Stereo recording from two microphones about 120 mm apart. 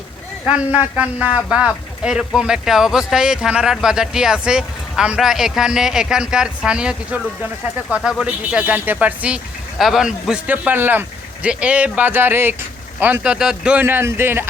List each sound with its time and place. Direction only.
0.9 s a man's voice: 10° right (ahead or behind)